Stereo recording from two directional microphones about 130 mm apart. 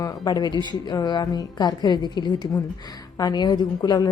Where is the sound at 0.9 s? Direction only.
30° left (ahead or behind).